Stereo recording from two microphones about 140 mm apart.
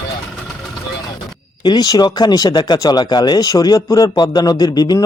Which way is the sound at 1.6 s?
30° left (ahead or behind).